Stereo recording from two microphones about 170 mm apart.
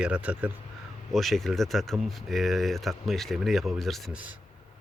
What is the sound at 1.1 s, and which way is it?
Speech, centre (ahead or behind).